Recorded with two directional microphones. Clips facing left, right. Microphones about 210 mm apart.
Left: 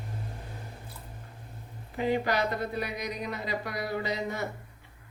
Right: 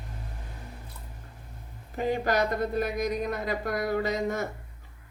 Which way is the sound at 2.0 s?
45° right (ahead or behind).